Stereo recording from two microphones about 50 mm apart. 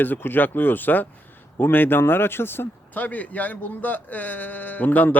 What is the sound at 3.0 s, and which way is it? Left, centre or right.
A man's voice, left.